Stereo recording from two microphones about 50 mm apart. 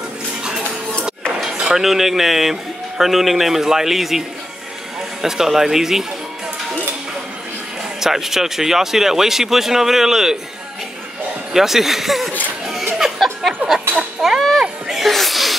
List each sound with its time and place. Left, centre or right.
1.6 s speech: centre
5.2 s speech: centre
8.0 s speech: centre
11.5 s speech: centre
12.9 s music: centre
13.9 s a sound: centre